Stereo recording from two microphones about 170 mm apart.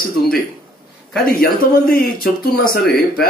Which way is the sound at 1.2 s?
60° left (ahead or behind).